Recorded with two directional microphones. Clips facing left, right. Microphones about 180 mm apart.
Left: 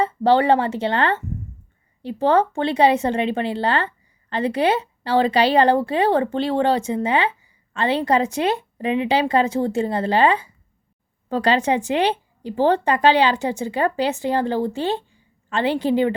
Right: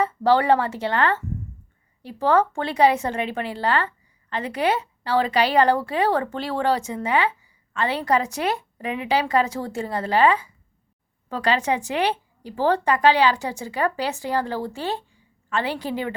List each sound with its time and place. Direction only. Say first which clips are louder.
0.0 s speech: left 2 dB; 25° left (ahead or behind)